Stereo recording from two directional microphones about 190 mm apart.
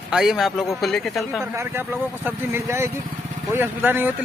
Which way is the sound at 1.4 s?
10° right (ahead or behind).